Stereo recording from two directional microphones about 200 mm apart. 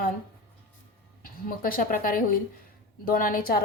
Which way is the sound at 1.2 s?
45° left (ahead or behind).